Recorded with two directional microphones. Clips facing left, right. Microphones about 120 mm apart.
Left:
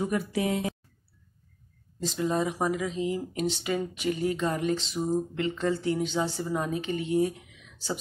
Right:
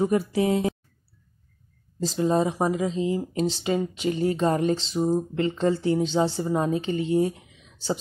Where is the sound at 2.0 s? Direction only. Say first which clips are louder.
Right 5 dB; 35° right (ahead or behind).